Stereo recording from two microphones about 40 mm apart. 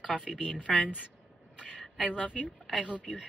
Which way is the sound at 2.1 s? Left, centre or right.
Left.